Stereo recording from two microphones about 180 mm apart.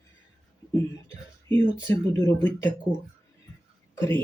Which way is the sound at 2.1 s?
15° left (ahead or behind).